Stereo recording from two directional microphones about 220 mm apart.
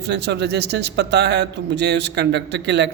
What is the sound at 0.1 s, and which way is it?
A man's voice, 50° right (ahead or behind).